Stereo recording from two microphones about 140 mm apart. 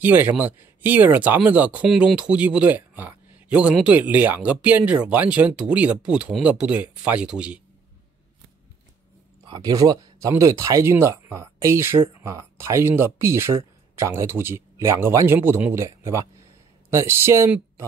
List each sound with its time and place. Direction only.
0.0 s speech: 15° right (ahead or behind)
9.5 s speech: 25° right (ahead or behind)